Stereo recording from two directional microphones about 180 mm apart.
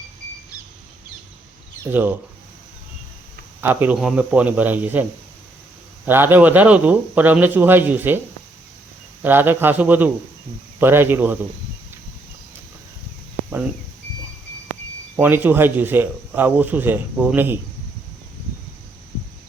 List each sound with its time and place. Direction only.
1.8 s a man's voice: 10° right (ahead or behind)
3.6 s a man's voice: 10° right (ahead or behind)
6.1 s a man's voice: 10° right (ahead or behind)
9.2 s a man's voice: 10° right (ahead or behind)
15.1 s a man's voice: 10° right (ahead or behind)